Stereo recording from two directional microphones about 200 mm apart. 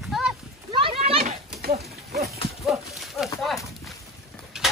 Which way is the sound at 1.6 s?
50° right (ahead or behind).